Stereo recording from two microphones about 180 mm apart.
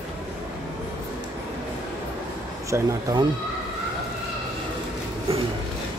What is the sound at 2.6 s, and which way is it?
Speech, 15° right (ahead or behind).